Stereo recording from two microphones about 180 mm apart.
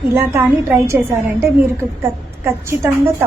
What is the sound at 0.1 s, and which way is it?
A woman's voice, 15° right (ahead or behind).